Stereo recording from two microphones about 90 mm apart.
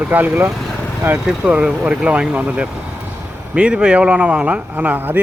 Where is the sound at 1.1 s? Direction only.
10° right (ahead or behind).